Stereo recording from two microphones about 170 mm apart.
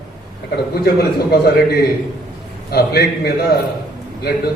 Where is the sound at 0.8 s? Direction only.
70° left (ahead or behind).